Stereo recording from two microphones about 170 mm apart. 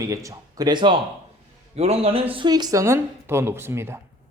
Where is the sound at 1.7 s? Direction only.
40° right (ahead or behind); by 4.0 s 15° right (ahead or behind).